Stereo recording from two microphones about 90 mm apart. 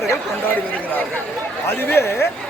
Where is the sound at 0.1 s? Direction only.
20° left (ahead or behind).